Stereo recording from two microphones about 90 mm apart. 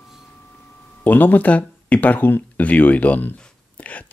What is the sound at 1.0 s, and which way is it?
Speech, 20° left (ahead or behind).